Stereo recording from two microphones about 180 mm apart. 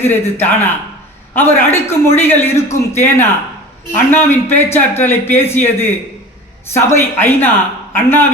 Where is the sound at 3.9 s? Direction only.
10° left (ahead or behind).